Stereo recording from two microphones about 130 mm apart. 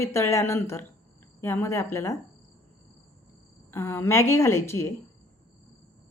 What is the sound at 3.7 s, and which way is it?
A woman's voice, 15° left (ahead or behind).